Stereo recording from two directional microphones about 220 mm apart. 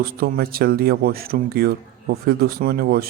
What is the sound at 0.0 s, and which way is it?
A man's voice, 45° right (ahead or behind).